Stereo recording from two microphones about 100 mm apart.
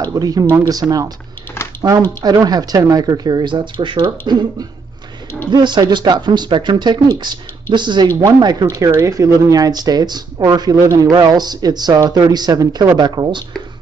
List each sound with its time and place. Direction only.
0.0 s speech: 40° right (ahead or behind)